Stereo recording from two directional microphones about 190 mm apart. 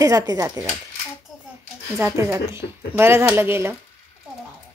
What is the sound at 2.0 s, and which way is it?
Speech, 15° right (ahead or behind).